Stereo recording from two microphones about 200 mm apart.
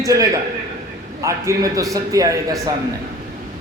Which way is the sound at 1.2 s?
15° right (ahead or behind).